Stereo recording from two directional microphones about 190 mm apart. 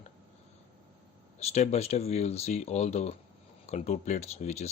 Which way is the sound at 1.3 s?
35° left (ahead or behind).